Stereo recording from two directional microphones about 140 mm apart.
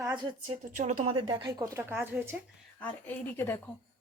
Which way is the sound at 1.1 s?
30° right (ahead or behind).